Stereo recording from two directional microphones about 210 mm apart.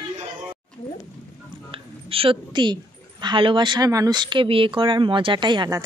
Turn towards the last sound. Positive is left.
turn(degrees=-20)  # may be behind; listen again after turning